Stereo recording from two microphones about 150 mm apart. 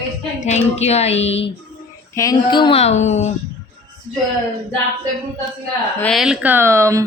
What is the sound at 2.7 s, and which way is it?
Speech, 50° left (ahead or behind).